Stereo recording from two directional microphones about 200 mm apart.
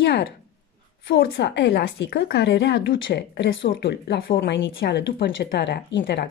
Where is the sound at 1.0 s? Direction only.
55° left (ahead or behind).